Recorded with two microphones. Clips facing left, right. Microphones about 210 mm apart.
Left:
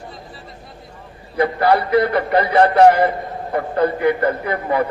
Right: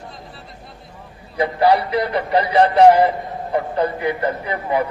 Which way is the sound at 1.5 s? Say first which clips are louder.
Even; 55° left (ahead or behind).